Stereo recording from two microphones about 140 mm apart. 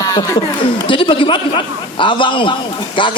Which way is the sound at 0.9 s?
40° left (ahead or behind).